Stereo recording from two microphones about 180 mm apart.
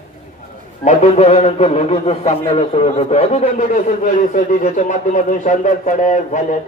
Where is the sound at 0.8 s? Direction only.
40° left (ahead or behind).